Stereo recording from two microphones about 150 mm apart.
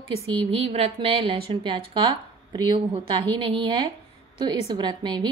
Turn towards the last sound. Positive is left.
turn(degrees=-30)  # may be behind; listen again after turning